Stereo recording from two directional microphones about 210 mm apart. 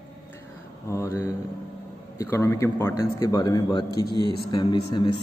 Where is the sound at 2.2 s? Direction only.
10° left (ahead or behind).